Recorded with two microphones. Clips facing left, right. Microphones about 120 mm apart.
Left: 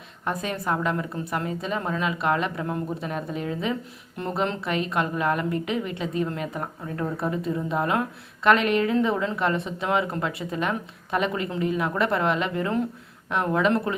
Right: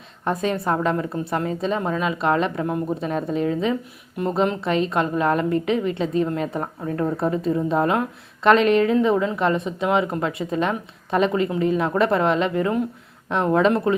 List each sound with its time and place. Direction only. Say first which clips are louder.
0.3 s a woman's voice: right 5 dB; 25° right (ahead or behind)